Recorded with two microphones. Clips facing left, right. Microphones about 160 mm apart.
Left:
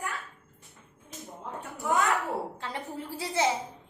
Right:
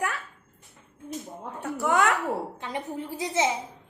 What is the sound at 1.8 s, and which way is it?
Speech, 80° right.